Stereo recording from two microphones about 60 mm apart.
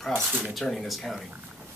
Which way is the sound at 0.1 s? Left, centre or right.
Right.